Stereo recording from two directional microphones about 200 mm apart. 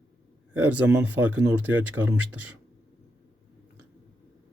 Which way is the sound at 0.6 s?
10° right (ahead or behind).